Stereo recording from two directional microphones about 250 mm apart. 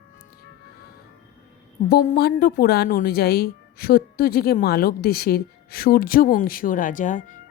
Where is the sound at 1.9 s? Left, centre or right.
Left.